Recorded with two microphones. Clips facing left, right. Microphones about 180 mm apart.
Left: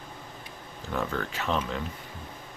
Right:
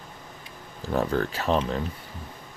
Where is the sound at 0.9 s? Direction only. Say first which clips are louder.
Right 6 dB; 35° right (ahead or behind).